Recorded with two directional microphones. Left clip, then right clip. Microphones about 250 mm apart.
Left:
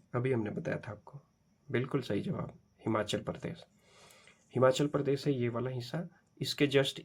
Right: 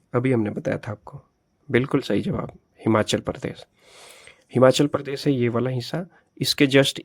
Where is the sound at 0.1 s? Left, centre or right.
Right.